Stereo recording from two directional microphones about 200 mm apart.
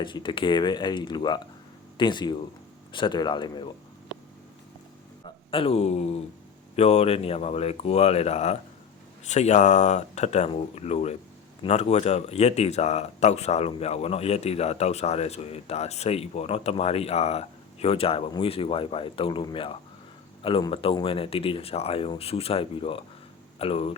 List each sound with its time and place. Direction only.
0.0 s speech: 25° left (ahead or behind)
5.2 s speech: 25° left (ahead or behind)